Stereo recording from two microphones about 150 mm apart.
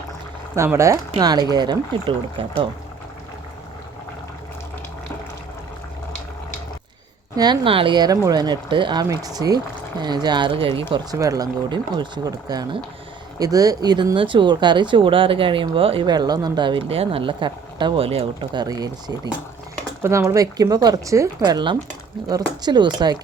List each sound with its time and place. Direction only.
0.5 s speech: 20° right (ahead or behind); by 2.6 s 35° right (ahead or behind)
7.3 s speech: 30° right (ahead or behind)
18.6 s speech: 25° right (ahead or behind)